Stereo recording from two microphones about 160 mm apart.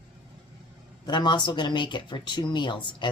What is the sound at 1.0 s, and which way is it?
Speech, 25° left (ahead or behind).